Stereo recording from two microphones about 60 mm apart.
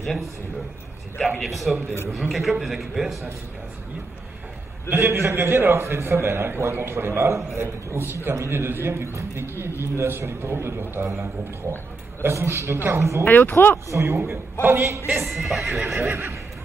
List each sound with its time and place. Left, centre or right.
0.0 s a man's voice: centre
1.4 s speech: centre
4.8 s a man's voice: right
12.2 s a man's voice: right
13.2 s speech: left
13.9 s a man's voice: right
15.0 s speech: centre
16.1 s a man's voice: right